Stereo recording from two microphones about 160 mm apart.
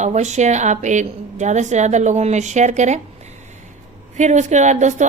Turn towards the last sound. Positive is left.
turn(degrees=-45)  # may be behind; listen again after turning